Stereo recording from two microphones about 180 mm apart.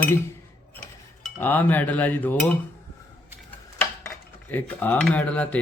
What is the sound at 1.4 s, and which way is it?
Speech, 10° left (ahead or behind).